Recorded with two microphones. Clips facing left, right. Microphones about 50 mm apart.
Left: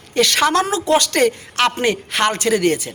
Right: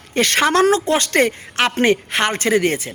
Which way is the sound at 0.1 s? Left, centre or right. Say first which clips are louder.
Even; right.